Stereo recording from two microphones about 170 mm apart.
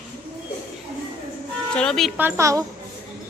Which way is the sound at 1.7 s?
5° left (ahead or behind).